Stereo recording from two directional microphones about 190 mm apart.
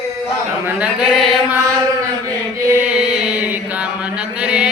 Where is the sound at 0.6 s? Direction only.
5° right (ahead or behind).